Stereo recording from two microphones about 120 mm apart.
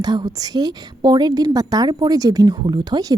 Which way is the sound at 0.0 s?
35° right (ahead or behind).